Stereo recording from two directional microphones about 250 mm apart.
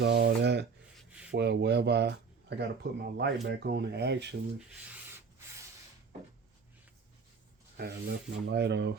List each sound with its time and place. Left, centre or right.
0.0 s speech: right
3.4 s rub: right
7.8 s rub: right